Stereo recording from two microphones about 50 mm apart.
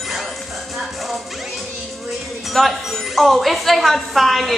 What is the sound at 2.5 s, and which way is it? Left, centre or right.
A woman's voice, centre.